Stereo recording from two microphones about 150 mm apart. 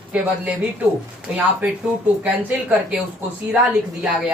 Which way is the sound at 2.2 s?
10° right (ahead or behind).